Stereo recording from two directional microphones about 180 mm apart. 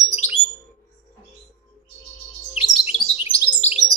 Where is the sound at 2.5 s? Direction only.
30° left (ahead or behind).